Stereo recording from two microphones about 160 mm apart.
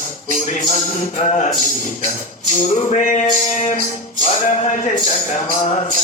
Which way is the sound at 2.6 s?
45° left (ahead or behind).